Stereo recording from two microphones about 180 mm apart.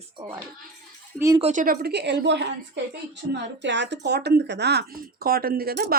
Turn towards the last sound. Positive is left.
turn(degrees=-60)  # may be behind; listen again after turning